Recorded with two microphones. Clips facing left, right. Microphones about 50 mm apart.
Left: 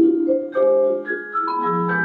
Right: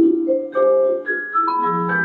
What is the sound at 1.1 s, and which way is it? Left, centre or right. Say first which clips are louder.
Music: right 4 dB; centre.